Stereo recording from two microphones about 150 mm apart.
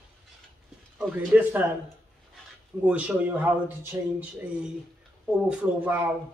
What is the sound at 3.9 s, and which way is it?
Music, 20° right (ahead or behind).